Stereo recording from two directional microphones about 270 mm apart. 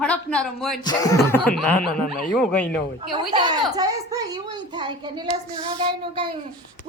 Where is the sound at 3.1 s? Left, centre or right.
Centre.